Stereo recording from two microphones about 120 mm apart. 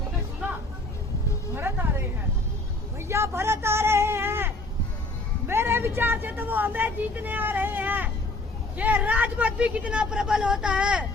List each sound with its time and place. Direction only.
1.5 s music: 20° right (ahead or behind)
3.0 s a sound: 20° right (ahead or behind)
5.5 s a woman's voice: 20° right (ahead or behind)